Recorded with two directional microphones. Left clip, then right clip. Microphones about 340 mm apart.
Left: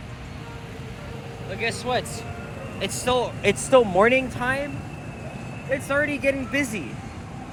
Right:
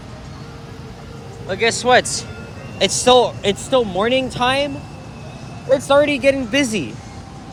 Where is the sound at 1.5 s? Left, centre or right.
Centre.